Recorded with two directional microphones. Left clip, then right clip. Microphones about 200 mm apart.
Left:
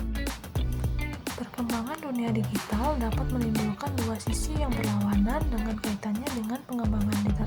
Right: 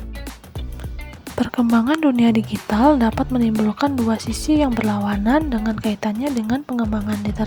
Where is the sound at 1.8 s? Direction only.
45° right (ahead or behind).